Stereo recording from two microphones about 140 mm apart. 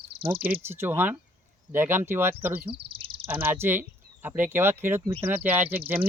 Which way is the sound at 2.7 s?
40° right (ahead or behind).